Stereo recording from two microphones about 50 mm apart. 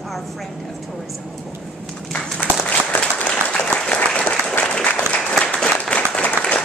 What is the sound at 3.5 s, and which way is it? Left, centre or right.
Applause, left.